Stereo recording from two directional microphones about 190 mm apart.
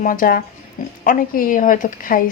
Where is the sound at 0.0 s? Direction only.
45° left (ahead or behind).